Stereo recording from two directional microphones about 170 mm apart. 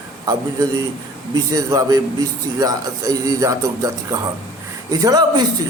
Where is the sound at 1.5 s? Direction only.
20° right (ahead or behind).